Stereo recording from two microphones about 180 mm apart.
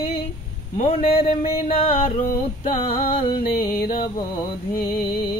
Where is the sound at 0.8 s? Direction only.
35° left (ahead or behind).